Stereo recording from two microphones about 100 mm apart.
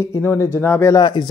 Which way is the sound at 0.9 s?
45° left (ahead or behind).